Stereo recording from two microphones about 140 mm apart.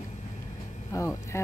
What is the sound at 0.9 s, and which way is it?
Speech, 20° left (ahead or behind).